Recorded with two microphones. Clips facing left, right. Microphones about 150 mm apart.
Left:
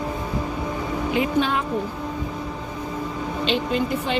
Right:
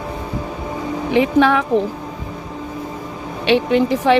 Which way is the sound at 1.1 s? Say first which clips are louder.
Right 9 dB; 85° right.